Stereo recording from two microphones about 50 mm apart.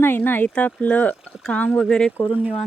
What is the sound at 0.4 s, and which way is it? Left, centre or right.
Speech, left.